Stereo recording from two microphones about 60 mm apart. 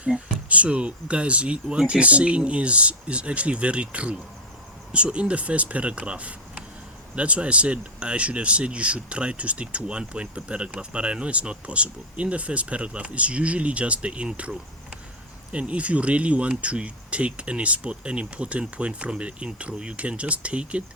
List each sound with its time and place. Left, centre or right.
0.0 s speech: right
15.5 s speech: right